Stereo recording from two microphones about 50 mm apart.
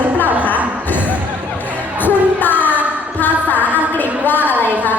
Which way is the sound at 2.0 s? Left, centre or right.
Left.